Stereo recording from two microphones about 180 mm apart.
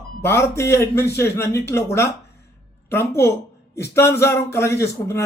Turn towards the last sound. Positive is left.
turn(degrees=15)  # may be behind; listen again after turning